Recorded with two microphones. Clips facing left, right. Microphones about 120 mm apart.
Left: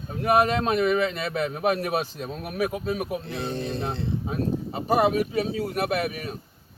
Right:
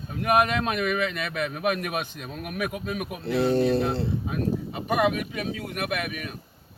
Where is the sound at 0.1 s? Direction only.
30° left (ahead or behind).